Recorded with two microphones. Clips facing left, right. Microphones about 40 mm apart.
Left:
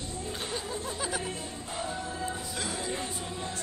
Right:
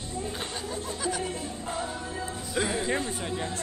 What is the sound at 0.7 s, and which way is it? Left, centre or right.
Music, centre.